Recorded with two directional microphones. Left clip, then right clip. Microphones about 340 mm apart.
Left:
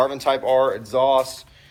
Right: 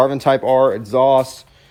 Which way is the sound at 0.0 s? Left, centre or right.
Right.